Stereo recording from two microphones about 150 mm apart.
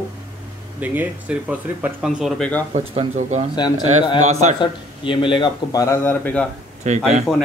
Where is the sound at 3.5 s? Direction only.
30° left (ahead or behind).